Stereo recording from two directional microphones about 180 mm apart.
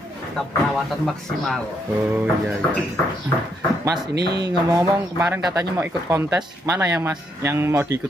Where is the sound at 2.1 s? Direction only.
10° right (ahead or behind).